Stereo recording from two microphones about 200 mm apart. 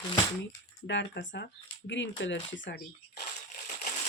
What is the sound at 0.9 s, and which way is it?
Speech, 60° left (ahead or behind).